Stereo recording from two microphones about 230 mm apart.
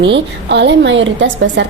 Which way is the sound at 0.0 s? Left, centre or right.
Right.